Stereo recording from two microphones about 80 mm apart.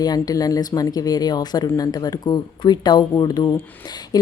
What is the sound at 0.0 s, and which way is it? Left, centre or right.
A woman's voice, left.